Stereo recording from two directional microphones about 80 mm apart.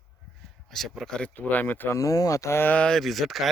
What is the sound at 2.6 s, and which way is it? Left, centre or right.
Speech, centre.